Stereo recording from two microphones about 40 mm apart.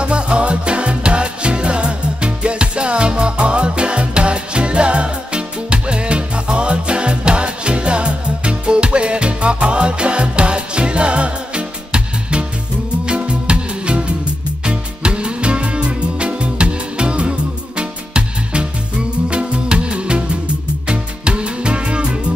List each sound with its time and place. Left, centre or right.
0.0 s music: right